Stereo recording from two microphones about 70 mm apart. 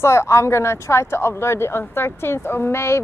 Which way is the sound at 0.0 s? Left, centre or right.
Left.